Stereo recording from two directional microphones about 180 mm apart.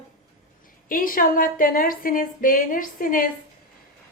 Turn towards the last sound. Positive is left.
turn(degrees=50)  # may be behind; listen again after turning